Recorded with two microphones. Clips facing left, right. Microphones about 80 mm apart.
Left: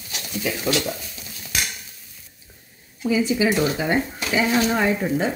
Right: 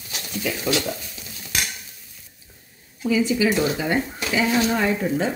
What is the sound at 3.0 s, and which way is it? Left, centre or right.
Speech, centre.